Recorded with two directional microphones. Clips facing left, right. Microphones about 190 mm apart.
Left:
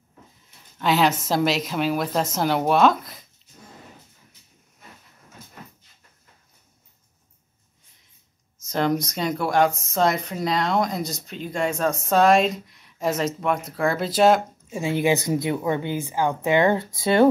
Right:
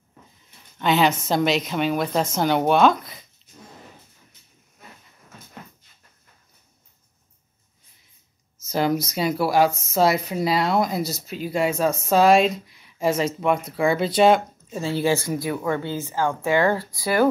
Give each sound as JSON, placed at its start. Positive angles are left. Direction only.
{"t": 0.7, "sound": "a woman's voice", "side_deg": 0}
{"t": 8.6, "sound": "speech", "side_deg": -5}
{"t": 14.7, "sound": "speech", "side_deg": 15}